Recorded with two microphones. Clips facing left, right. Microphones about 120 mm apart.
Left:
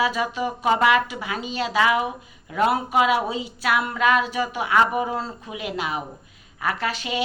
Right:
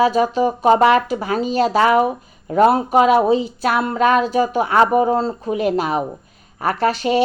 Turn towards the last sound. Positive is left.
turn(degrees=-40)  # may be behind; listen again after turning